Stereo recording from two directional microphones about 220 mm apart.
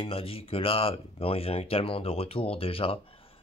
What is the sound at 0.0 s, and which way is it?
Speech, 25° left (ahead or behind).